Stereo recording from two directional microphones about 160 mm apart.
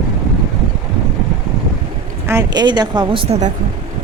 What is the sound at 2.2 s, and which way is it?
Speech, 20° right (ahead or behind).